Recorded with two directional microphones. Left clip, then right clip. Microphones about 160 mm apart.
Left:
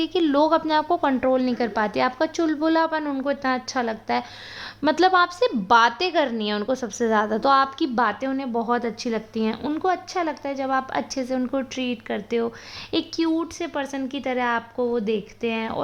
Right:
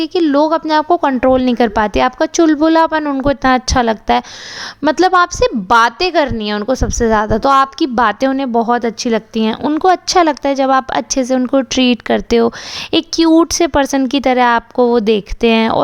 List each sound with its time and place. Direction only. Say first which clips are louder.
0.0 s a woman's voice: right 7 dB; 30° right (ahead or behind)
3.2 s a woman's voice: right 12 dB; 50° right (ahead or behind)
4.8 s a woman's voice: right 7 dB; 35° right (ahead or behind)
9.8 s a woman's voice: right 14 dB; 55° right (ahead or behind)